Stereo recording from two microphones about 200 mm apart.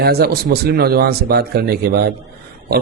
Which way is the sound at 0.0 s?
50° right (ahead or behind).